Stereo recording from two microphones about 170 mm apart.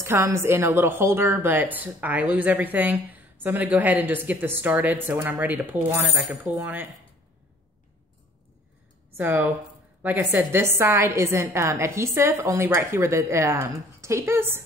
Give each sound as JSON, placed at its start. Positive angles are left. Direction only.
{"t": 0.0, "sound": "a woman's voice", "side_deg": -15}
{"t": 9.1, "sound": "a woman's voice", "side_deg": -10}